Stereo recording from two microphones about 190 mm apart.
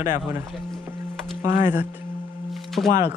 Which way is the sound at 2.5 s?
Centre (ahead or behind).